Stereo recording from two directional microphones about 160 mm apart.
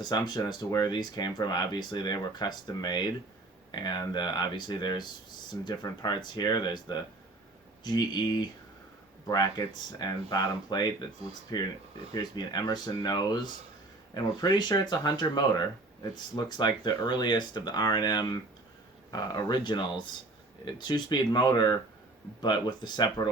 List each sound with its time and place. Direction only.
0.0 s speech: 25° left (ahead or behind)